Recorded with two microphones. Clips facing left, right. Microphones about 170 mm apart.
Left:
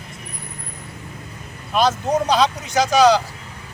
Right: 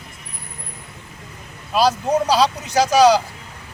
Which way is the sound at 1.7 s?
35° right (ahead or behind).